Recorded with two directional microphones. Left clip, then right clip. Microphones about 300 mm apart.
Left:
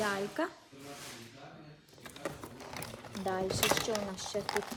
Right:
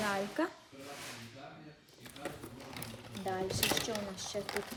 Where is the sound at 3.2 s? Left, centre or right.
Centre.